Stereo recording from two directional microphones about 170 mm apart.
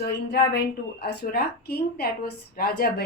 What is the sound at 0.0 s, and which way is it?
A woman's voice, 75° left (ahead or behind).